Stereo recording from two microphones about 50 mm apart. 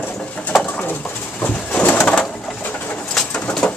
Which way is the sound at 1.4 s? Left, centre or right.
Left.